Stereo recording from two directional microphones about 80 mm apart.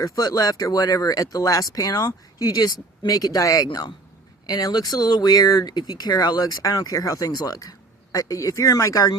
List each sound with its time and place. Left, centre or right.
0.0 s speech: left